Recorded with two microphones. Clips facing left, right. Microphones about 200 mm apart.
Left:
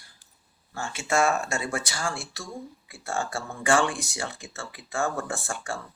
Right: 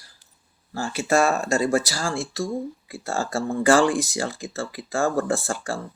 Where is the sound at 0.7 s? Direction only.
35° right (ahead or behind).